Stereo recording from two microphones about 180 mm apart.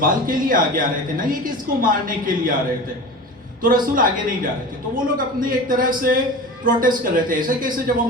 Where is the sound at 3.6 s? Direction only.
50° right (ahead or behind).